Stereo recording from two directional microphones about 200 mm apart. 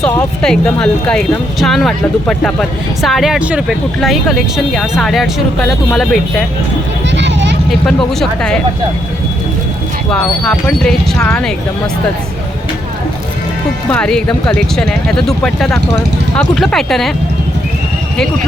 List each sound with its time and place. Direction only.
0.0 s speech: 5° left (ahead or behind)
7.1 s a sound: 65° right (ahead or behind)
7.9 s speech: 5° left (ahead or behind)
10.1 s speech: 5° left (ahead or behind)
13.9 s speech: 5° left (ahead or behind)